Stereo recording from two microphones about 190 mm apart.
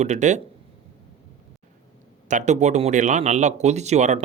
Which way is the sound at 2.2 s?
40° right (ahead or behind).